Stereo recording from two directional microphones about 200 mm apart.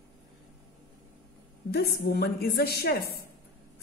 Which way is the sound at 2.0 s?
50° left (ahead or behind).